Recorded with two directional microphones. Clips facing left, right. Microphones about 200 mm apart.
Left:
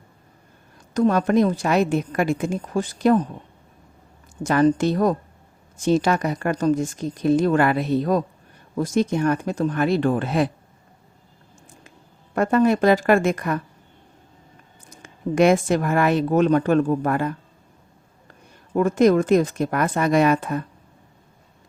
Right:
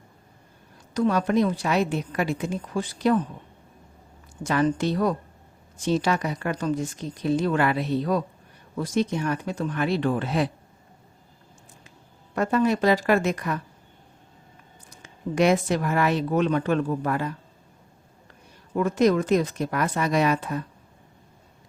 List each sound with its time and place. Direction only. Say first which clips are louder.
0.9 s speech: left 4 dB; 50° left (ahead or behind)
4.4 s speech: left 5 dB; 45° left (ahead or behind)
12.3 s speech: left 4 dB; 50° left (ahead or behind)
14.8 s speech: left 5 dB; 50° left (ahead or behind)
18.8 s speech: left 4 dB; 50° left (ahead or behind)